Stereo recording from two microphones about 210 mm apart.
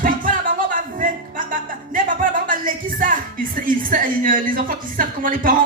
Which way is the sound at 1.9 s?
40° right (ahead or behind).